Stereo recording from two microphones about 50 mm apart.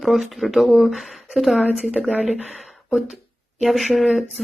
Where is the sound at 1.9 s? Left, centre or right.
Right.